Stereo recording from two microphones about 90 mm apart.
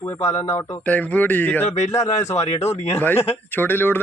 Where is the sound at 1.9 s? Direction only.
35° left (ahead or behind).